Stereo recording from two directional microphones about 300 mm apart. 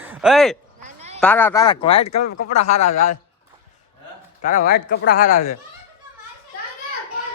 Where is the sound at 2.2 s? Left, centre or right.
Left.